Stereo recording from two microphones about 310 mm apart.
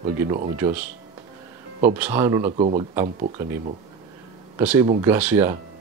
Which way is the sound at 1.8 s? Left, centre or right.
Centre.